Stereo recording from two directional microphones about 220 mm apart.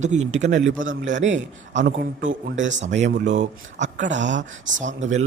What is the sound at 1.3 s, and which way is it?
A man's voice, 55° right (ahead or behind).